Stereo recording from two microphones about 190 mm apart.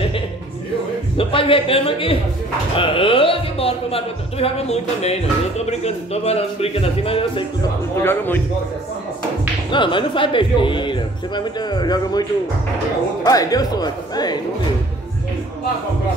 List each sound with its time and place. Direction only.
1.1 s speech: 30° left (ahead or behind)
8.0 s speech: 10° left (ahead or behind)
9.7 s speech: 25° left (ahead or behind)